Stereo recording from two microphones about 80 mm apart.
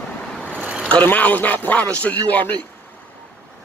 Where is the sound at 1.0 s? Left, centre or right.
Left.